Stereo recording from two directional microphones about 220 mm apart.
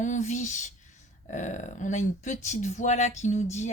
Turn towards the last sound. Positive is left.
turn(degrees=30)  # may be behind; listen again after turning